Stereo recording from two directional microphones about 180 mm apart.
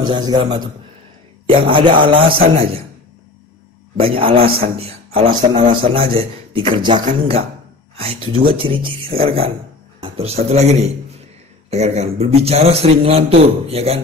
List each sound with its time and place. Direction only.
0.0 s a man's voice: 25° right (ahead or behind)
4.0 s a man's voice: 30° right (ahead or behind)